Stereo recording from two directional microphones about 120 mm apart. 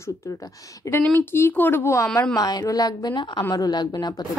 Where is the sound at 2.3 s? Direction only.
30° left (ahead or behind).